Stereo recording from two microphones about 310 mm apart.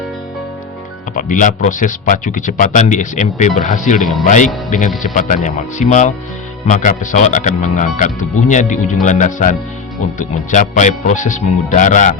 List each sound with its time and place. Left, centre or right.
1.1 s speech: left